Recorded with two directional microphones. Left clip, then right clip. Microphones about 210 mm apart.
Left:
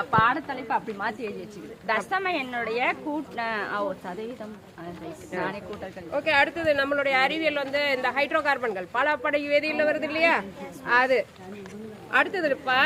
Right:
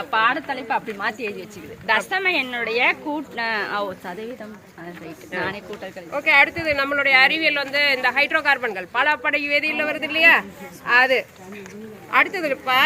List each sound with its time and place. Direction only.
0.0 s speech: 40° right (ahead or behind)
5.4 s speech: 35° right (ahead or behind)
6.1 s speech: 5° right (ahead or behind)
12.3 s speech: 10° right (ahead or behind)